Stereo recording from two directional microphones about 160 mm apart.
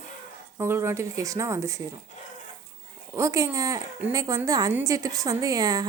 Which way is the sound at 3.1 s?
20° right (ahead or behind).